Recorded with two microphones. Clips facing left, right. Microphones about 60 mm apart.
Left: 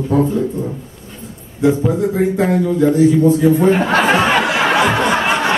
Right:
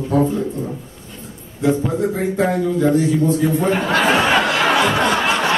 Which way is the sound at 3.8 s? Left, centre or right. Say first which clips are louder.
Left 2 dB; left.